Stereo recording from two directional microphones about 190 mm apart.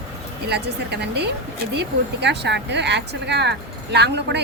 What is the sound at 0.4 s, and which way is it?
Speech, 60° right (ahead or behind).